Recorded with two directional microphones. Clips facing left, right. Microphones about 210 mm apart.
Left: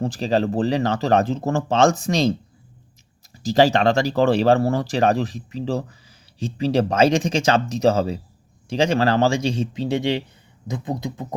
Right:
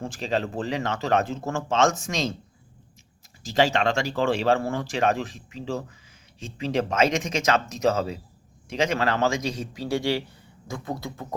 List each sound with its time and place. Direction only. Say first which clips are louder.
0.0 s speech: left 7 dB; 35° left (ahead or behind)
3.4 s speech: left 6 dB; 35° left (ahead or behind); by 11.3 s 20° left (ahead or behind)